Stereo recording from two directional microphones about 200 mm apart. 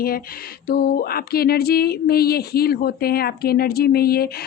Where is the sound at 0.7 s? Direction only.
50° left (ahead or behind).